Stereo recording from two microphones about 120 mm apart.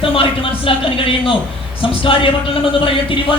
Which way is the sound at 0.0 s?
45° left (ahead or behind).